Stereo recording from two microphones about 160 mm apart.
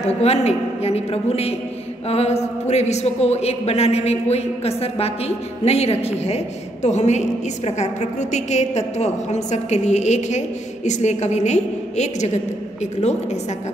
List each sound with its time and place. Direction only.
0.0 s a woman's voice: 40° left (ahead or behind)